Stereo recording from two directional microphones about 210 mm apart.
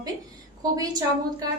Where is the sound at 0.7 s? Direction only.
15° right (ahead or behind).